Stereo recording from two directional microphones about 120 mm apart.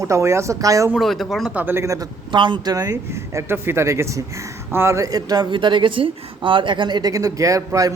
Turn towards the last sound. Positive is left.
turn(degrees=-30)  # may be behind; listen again after turning